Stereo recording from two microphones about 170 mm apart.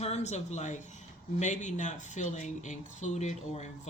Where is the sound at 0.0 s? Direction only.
40° left (ahead or behind).